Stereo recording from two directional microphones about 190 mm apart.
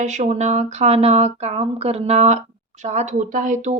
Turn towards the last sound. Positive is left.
turn(degrees=-40)  # may be behind; listen again after turning